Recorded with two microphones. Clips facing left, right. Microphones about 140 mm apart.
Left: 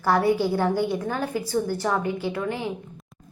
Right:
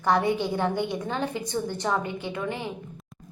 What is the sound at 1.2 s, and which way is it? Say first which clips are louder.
A woman's voice: left 3 dB; 5° left (ahead or behind).